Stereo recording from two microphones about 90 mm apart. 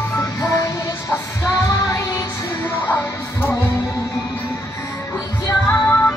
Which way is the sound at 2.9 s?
20° left (ahead or behind).